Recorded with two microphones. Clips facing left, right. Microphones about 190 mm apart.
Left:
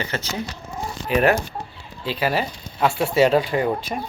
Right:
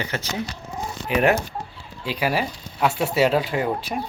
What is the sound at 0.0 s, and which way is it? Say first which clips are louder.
Speech: even; 15° right (ahead or behind).